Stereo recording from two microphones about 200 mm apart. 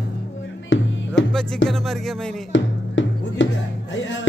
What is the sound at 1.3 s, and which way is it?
Music, 5° left (ahead or behind).